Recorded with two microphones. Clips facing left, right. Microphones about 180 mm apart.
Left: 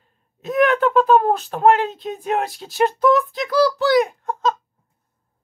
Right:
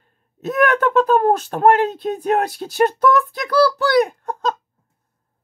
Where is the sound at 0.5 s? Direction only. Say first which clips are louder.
Even; 45° right (ahead or behind).